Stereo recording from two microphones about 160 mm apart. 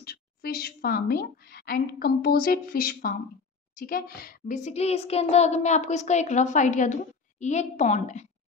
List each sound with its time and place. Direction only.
0.0 s a woman's voice: 70° left (ahead or behind)
4.6 s a woman's voice: 45° left (ahead or behind)